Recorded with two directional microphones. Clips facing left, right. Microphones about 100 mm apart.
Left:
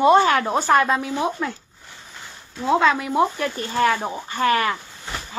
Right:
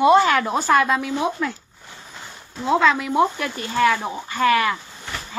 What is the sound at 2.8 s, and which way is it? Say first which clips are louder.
Speech: right 2 dB; 35° left (ahead or behind).